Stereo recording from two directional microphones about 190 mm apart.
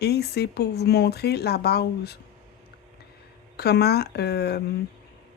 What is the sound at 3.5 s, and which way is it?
Speech, 60° left (ahead or behind).